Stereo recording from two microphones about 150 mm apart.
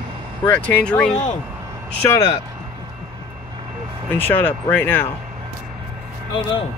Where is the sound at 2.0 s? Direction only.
20° left (ahead or behind).